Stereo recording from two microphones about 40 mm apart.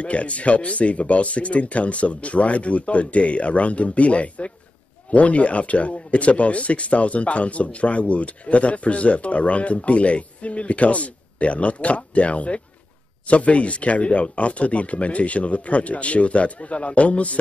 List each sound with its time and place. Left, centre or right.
0.0 s speech: left